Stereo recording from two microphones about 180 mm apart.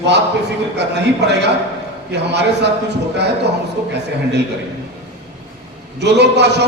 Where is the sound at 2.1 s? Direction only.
70° right (ahead or behind).